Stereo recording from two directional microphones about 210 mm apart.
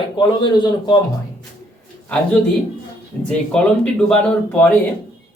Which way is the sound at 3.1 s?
5° left (ahead or behind).